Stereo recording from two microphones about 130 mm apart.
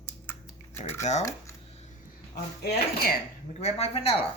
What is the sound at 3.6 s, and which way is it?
Speech, 50° left (ahead or behind).